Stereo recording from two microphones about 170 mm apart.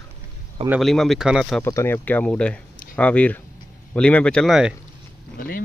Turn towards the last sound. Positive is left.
turn(degrees=55)  # may be behind; listen again after turning